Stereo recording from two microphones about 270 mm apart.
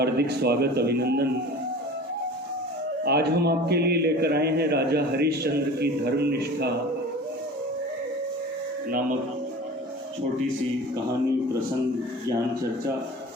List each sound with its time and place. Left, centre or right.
0.0 s a man's voice: right
3.0 s a man's voice: right